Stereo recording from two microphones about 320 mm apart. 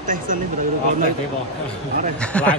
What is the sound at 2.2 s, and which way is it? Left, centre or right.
Speech, centre.